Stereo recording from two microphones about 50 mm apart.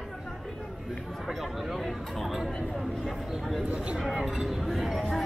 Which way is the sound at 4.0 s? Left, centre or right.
Centre.